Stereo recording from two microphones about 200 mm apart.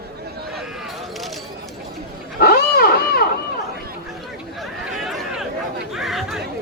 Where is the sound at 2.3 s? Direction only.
50° left (ahead or behind).